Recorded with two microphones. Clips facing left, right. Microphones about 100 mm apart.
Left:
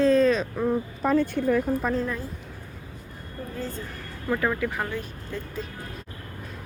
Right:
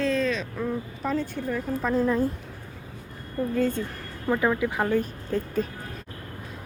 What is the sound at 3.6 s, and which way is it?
Speech, 60° right (ahead or behind).